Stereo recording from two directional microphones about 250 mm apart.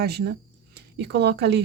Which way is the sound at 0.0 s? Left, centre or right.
Right.